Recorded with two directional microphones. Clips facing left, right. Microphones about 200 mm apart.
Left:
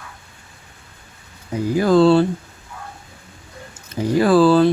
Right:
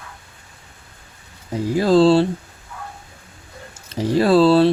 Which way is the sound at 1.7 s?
30° right (ahead or behind).